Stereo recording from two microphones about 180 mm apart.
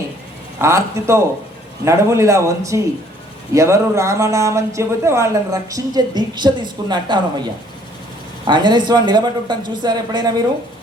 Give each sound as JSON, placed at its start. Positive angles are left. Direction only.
{"t": 0.6, "sound": "speech", "side_deg": -15}